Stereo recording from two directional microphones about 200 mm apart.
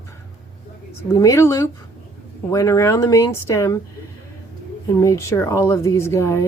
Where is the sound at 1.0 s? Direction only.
15° left (ahead or behind).